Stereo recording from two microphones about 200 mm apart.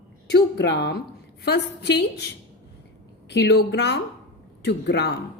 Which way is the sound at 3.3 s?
60° left (ahead or behind).